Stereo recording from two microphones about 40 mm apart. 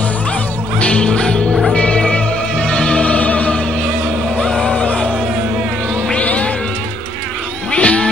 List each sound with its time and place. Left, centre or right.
0.7 s music: left
4.8 s a sound: left
6.1 s cat: left
7.7 s vehicle: left